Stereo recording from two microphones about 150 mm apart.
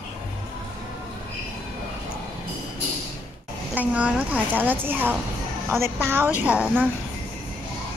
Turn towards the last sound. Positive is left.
turn(degrees=-10)  # may be behind; listen again after turning